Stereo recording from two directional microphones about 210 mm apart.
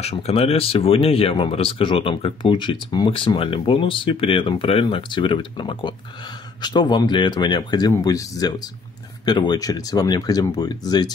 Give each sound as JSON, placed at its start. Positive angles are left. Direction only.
{"t": 0.0, "sound": "speech", "side_deg": 30}